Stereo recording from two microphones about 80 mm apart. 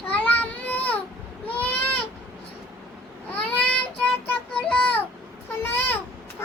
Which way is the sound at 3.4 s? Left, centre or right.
Centre.